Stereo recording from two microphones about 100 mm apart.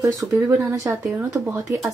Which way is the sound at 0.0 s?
30° right (ahead or behind).